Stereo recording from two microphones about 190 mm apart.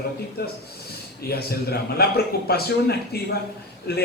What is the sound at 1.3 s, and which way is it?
A man's voice, 55° left (ahead or behind).